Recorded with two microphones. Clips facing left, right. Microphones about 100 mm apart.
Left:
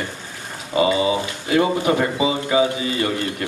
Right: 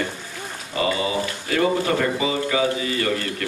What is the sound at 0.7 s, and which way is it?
Speech, 20° left (ahead or behind).